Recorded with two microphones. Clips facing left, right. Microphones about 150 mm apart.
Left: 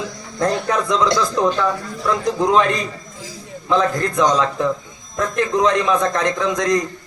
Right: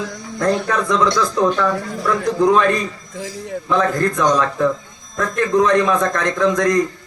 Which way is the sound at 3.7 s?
20° left (ahead or behind).